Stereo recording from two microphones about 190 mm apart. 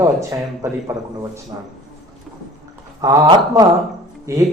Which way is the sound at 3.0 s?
20° right (ahead or behind).